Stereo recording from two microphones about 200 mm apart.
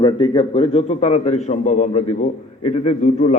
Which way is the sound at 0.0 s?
25° left (ahead or behind).